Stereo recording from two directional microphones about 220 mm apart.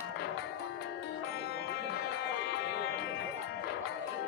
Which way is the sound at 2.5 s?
50° left (ahead or behind).